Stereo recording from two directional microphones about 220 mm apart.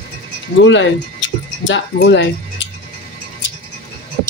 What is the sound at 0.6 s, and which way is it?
Speech, 55° left (ahead or behind).